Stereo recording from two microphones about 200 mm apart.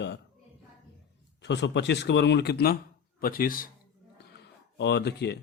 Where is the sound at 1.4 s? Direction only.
60° left (ahead or behind); by 3.7 s 45° left (ahead or behind).